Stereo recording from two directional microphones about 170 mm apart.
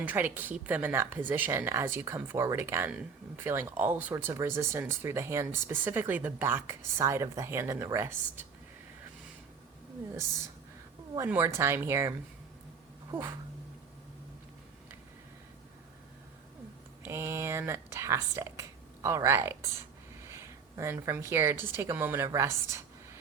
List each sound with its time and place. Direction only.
0.0 s speech: 10° right (ahead or behind)
11.3 s speech: 15° right (ahead or behind)
13.1 s a sound: 15° right (ahead or behind)
17.0 s a woman's voice: 15° right (ahead or behind)